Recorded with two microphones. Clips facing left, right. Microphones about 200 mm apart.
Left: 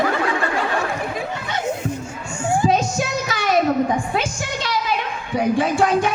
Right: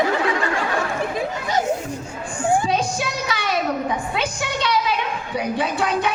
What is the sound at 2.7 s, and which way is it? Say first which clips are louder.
Music: left 2 dB; 45° left (ahead or behind).